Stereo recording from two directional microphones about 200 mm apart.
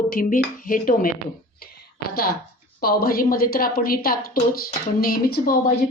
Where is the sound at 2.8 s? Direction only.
45° left (ahead or behind).